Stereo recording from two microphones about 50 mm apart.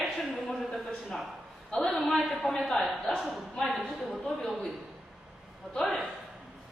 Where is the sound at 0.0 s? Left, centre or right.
Centre.